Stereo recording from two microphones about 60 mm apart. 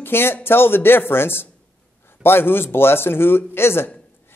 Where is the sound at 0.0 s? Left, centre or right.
Left.